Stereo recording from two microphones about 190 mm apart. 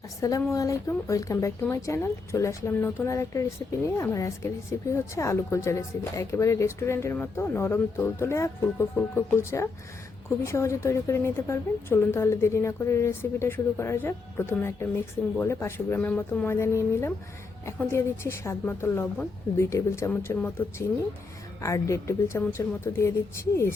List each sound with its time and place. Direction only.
0.2 s a woman's voice: 15° left (ahead or behind)